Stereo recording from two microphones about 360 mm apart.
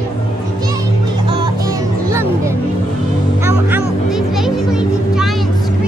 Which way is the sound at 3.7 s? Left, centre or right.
Centre.